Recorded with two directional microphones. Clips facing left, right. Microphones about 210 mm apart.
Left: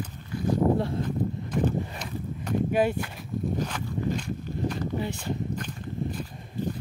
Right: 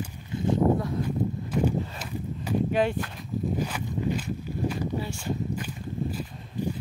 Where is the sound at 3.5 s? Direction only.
10° right (ahead or behind).